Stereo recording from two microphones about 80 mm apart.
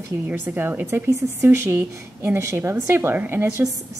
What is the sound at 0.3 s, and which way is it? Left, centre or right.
A woman's voice, right.